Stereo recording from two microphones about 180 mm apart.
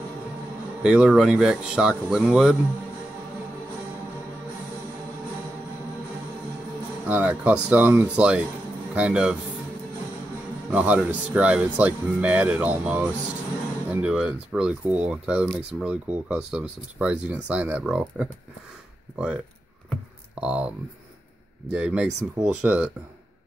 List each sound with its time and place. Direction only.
0.8 s speech: 5° right (ahead or behind)
7.1 s speech: 10° right (ahead or behind)
10.7 s speech: 10° right (ahead or behind)
19.9 s a sound: 5° right (ahead or behind)
21.7 s speech: 5° right (ahead or behind)